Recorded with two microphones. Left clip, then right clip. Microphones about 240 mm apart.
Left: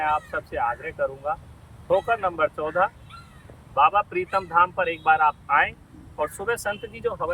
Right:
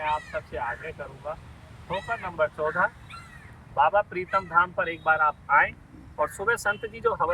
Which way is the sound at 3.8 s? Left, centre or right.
Centre.